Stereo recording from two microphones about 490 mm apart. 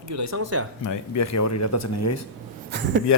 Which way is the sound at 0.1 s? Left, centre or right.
Right.